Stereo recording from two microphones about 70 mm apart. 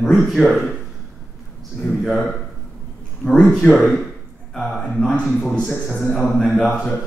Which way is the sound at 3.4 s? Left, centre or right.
Centre.